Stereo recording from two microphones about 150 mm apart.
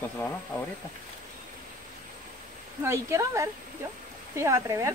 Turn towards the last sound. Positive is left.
turn(degrees=-20)  # may be behind; listen again after turning